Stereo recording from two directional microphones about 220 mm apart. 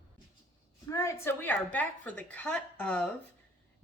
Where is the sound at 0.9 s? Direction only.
15° left (ahead or behind).